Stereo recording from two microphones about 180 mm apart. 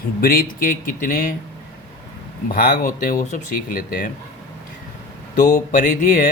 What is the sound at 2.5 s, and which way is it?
Speech, 55° left (ahead or behind).